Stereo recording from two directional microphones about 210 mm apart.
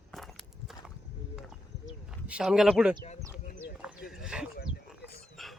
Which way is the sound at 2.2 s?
5° right (ahead or behind).